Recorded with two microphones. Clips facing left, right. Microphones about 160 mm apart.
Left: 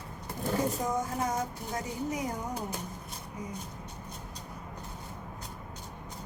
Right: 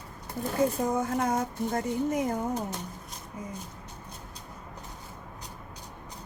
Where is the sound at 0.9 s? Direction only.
55° right (ahead or behind).